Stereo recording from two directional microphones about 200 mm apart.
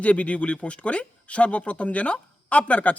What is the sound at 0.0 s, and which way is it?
Speech, 5° left (ahead or behind).